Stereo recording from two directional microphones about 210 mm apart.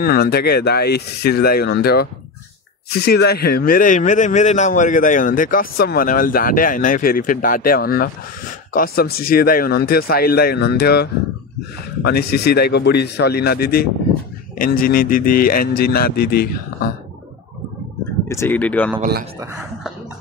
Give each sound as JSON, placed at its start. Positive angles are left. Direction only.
{"t": 0.0, "sound": "a man's voice", "side_deg": 45}
{"t": 18.3, "sound": "speech", "side_deg": 10}
{"t": 18.9, "sound": "speech", "side_deg": -45}